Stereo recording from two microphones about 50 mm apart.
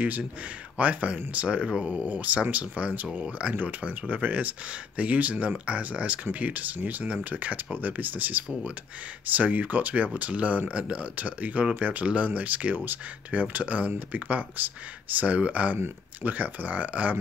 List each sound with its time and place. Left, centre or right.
0.7 s speech: right